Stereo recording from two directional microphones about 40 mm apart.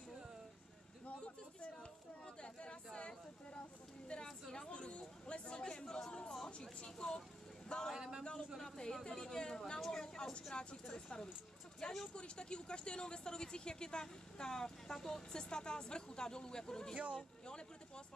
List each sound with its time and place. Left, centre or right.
1.0 s a sound: left
2.2 s chatter: left
4.1 s a sound: left
5.6 s chatter: centre
6.4 s speech: centre
7.6 s vehicle: left
7.9 s a sound: centre
8.2 s a man's voice: left
9.8 s a sound: centre
10.5 s speech: left
16.9 s speech: right
17.5 s speech: left